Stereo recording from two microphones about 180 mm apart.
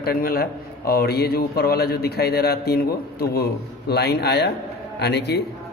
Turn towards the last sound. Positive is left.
turn(degrees=65)  # may be behind; listen again after turning